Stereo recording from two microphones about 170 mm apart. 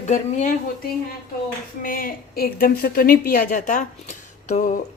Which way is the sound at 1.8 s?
55° left (ahead or behind).